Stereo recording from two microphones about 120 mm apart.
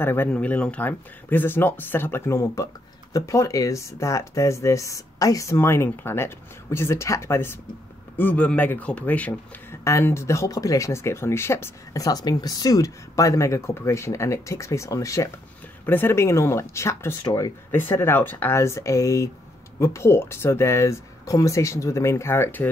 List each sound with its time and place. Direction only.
0.0 s speech: 20° left (ahead or behind)
9.8 s speech: 25° left (ahead or behind)